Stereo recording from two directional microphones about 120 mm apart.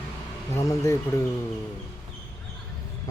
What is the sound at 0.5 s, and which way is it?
Speech, 25° left (ahead or behind).